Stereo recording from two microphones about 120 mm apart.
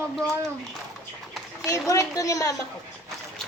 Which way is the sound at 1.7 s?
25° left (ahead or behind).